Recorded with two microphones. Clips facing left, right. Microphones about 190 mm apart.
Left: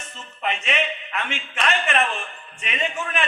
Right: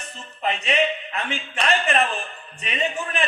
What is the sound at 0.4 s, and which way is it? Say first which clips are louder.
A man's voice: right 3 dB; 35° right (ahead or behind).